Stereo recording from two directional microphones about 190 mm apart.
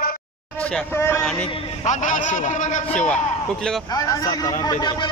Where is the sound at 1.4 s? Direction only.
30° left (ahead or behind).